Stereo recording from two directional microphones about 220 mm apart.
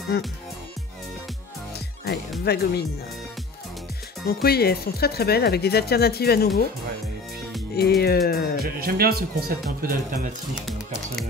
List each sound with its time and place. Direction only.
0.1 s speech: 45° left (ahead or behind)
2.4 s speech: 45° left (ahead or behind)
4.3 s speech: 45° left (ahead or behind)
8.0 s speech: 45° left (ahead or behind)
8.7 s speech: 45° right (ahead or behind)